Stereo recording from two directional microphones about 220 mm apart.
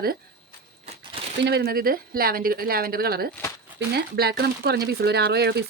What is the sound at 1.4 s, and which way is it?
Speech, 50° right (ahead or behind).